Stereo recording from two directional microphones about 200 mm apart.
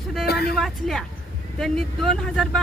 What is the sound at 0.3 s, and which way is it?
Speech, 50° left (ahead or behind).